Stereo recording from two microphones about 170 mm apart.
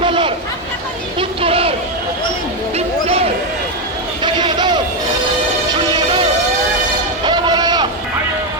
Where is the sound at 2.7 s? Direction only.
35° right (ahead or behind).